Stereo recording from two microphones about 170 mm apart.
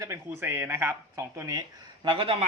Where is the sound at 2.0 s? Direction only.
30° right (ahead or behind).